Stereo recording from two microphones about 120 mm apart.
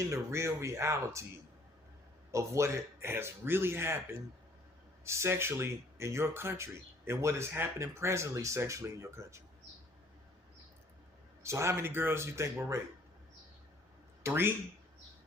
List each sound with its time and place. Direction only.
0.0 s speech: 25° right (ahead or behind)
2.3 s speech: 25° right (ahead or behind)
11.4 s speech: 25° right (ahead or behind)
14.3 s speech: 20° right (ahead or behind)